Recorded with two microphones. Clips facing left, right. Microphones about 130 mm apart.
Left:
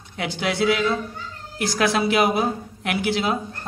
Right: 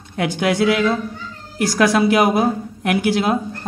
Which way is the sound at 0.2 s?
50° right (ahead or behind).